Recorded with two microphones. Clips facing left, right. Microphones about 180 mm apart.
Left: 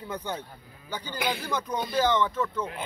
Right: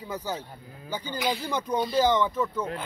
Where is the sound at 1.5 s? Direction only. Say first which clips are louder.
Right 3 dB; 10° right (ahead or behind).